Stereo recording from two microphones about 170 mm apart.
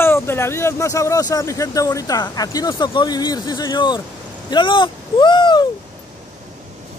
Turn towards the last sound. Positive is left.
turn(degrees=25)  # may be behind; listen again after turning